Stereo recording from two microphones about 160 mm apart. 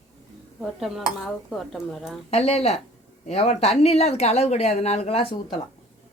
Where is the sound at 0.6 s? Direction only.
Centre (ahead or behind).